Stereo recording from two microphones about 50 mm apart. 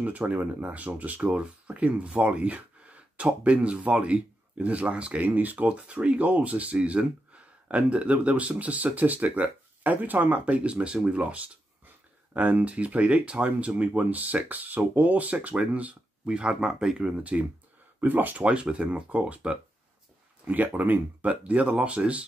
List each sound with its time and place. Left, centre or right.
0.0 s speech: right
5.2 s speech: right
18.0 s speech: right
18.4 s speech: right